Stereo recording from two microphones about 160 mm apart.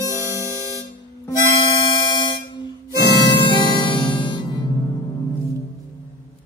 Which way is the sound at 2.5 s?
25° left (ahead or behind).